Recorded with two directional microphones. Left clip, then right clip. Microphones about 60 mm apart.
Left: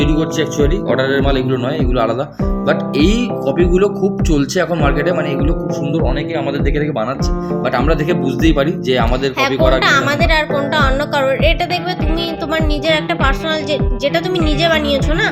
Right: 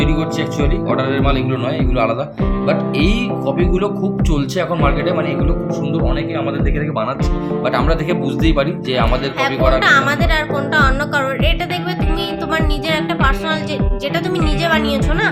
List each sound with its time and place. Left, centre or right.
0.0 s music: centre
1.1 s speech: centre
3.4 s speech: centre
7.8 s speech: centre
8.4 s speech: centre
9.8 s speech: left
12.5 s speech: left
14.6 s speech: left